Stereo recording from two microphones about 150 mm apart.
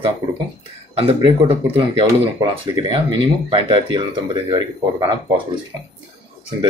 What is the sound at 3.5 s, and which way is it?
Speech, 35° right (ahead or behind).